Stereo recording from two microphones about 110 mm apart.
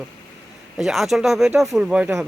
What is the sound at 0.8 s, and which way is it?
Speech, centre (ahead or behind).